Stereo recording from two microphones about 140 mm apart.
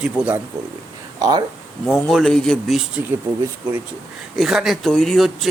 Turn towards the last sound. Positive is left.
turn(degrees=0)  # may be behind; listen again after turning